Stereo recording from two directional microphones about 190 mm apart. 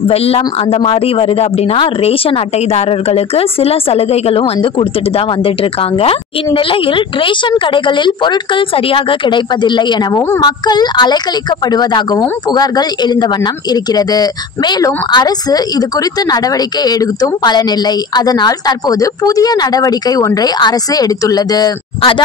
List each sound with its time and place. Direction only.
0.1 s speech: 30° left (ahead or behind)